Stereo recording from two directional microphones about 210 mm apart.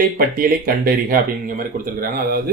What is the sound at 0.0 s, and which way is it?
Speech, 45° right (ahead or behind).